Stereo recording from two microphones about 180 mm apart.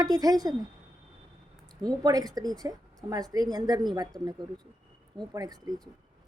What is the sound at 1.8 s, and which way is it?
A woman's voice, 20° right (ahead or behind).